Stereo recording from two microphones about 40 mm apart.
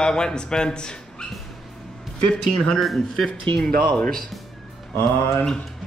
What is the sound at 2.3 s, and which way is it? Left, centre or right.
Speech, left.